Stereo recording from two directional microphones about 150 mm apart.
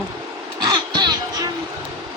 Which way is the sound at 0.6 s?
30° right (ahead or behind).